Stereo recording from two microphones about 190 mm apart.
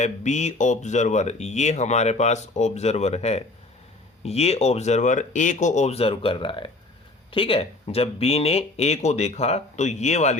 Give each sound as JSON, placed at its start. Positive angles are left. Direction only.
{"t": 0.0, "sound": "speech", "side_deg": 40}